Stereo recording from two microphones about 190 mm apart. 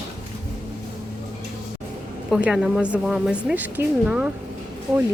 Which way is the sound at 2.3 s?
5° right (ahead or behind).